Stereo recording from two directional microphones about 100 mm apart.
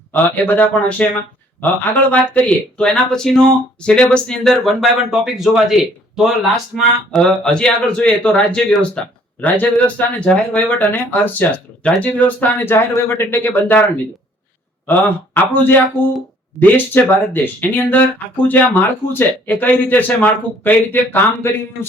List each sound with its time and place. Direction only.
0.1 s speech: 20° left (ahead or behind)
10.9 s speech: 20° left (ahead or behind)
15.4 s speech: 20° left (ahead or behind)